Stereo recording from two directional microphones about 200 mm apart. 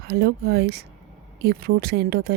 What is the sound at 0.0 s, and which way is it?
Speech, 50° right (ahead or behind).